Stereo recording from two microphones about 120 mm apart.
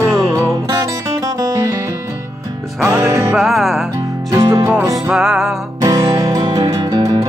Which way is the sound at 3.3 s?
Centre (ahead or behind).